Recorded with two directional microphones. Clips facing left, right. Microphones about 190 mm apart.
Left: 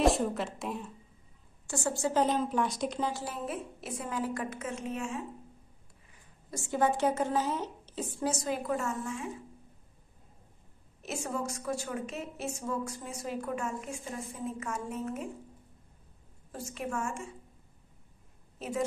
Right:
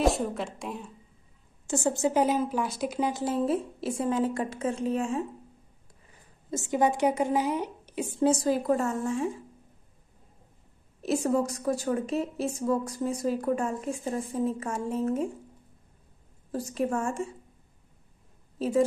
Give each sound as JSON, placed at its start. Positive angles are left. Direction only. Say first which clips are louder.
{"t": 0.0, "sound": "a woman's voice", "louder": "right 1 dB", "side_deg": 0}
{"t": 1.7, "sound": "a woman's voice", "louder": "right 5 dB", "side_deg": -20}
{"t": 2.2, "sound": "speech", "louder": "right 2 dB", "side_deg": -5}
{"t": 3.1, "sound": "a woman's voice", "louder": "right 7 dB", "side_deg": -20}
{"t": 3.4, "sound": "a woman's voice", "louder": "right 9 dB", "side_deg": -30}
{"t": 6.5, "sound": "a woman's voice", "louder": "right 3 dB", "side_deg": -15}
{"t": 8.3, "sound": "a woman's voice", "louder": "right 7 dB", "side_deg": -35}
{"t": 11.0, "sound": "a woman's voice", "louder": "right 10 dB", "side_deg": -35}
{"t": 16.5, "sound": "a woman's voice", "louder": "right 7 dB", "side_deg": -35}
{"t": 18.6, "sound": "a woman's voice", "louder": "right 9 dB", "side_deg": -35}